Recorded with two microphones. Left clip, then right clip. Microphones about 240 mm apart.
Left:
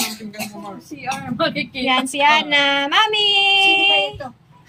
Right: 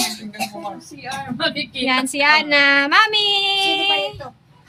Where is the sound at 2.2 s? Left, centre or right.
Centre.